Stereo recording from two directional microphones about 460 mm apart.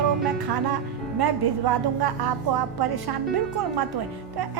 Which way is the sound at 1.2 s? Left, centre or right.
Right.